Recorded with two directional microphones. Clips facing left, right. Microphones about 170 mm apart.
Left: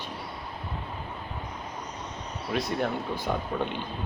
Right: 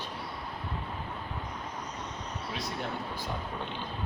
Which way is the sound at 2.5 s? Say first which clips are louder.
Left 9 dB; 65° left (ahead or behind).